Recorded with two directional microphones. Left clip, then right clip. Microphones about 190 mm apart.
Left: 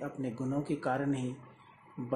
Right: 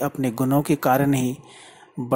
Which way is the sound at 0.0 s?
40° right (ahead or behind).